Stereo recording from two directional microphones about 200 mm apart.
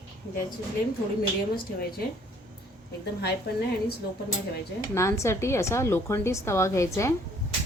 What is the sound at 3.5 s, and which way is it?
Speech, 55° left (ahead or behind).